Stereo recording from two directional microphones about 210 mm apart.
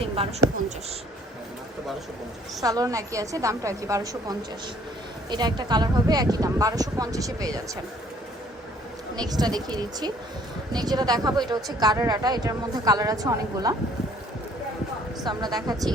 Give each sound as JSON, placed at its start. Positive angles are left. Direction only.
{"t": 0.0, "sound": "speech", "side_deg": -30}
{"t": 2.6, "sound": "speech", "side_deg": -15}
{"t": 9.1, "sound": "speech", "side_deg": -20}
{"t": 15.2, "sound": "speech", "side_deg": -20}